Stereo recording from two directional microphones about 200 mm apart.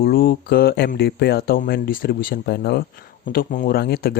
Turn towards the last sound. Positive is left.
turn(degrees=50)  # may be behind; listen again after turning